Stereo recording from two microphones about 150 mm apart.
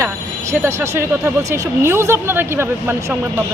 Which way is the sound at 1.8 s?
15° right (ahead or behind).